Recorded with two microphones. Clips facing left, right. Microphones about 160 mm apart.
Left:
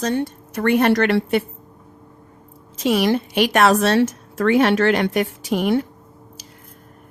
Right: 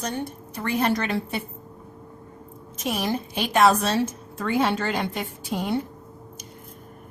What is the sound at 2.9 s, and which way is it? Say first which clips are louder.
A woman's voice: left 8 dB; 85° left.